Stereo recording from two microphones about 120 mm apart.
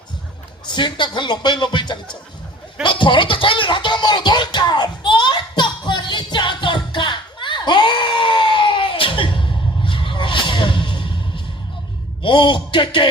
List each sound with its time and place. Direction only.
0.6 s speech: 40° left (ahead or behind)
2.8 s music: 45° left (ahead or behind)
12.2 s speech: 45° left (ahead or behind)